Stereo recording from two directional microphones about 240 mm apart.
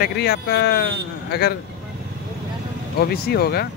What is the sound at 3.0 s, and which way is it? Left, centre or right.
Speech, left.